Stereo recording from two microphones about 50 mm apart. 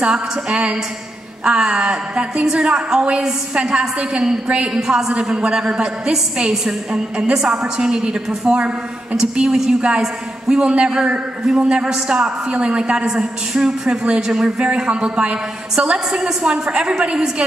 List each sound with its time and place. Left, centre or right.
0.0 s a woman's voice: centre